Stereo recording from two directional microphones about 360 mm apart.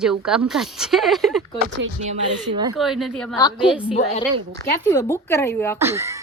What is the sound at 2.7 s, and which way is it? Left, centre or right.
A woman's voice, centre.